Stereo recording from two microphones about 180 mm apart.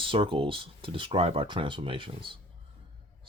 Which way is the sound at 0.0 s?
30° right (ahead or behind).